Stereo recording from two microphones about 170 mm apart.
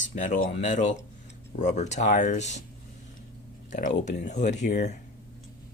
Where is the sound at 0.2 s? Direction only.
50° left (ahead or behind).